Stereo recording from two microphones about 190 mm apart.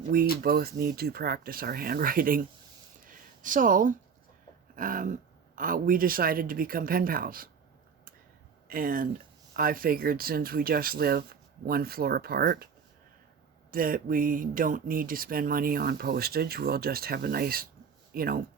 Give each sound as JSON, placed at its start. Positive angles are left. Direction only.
{"t": 0.1, "sound": "speech", "side_deg": -50}
{"t": 3.1, "sound": "a sound", "side_deg": -45}
{"t": 5.5, "sound": "speech", "side_deg": -45}
{"t": 8.6, "sound": "speech", "side_deg": -50}
{"t": 13.7, "sound": "speech", "side_deg": -50}